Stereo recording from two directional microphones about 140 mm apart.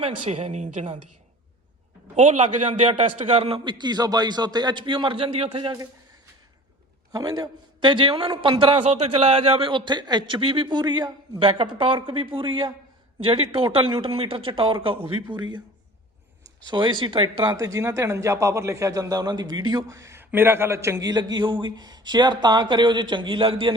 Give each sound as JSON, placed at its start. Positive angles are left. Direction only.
{"t": 0.0, "sound": "speech", "side_deg": -50}
{"t": 2.1, "sound": "a man's voice", "side_deg": -55}
{"t": 7.1, "sound": "a man's voice", "side_deg": -30}
{"t": 16.6, "sound": "a man's voice", "side_deg": -35}
{"t": 17.5, "sound": "a man's voice", "side_deg": -25}